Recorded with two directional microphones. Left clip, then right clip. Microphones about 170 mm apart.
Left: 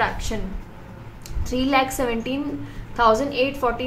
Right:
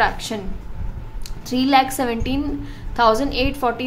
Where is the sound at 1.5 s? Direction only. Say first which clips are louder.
Right 4 dB; 30° right (ahead or behind).